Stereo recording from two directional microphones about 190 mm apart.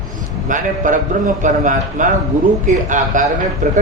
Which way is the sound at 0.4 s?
45° right (ahead or behind).